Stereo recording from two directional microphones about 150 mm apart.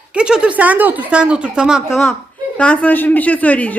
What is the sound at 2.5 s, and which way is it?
A woman's voice, 10° left (ahead or behind).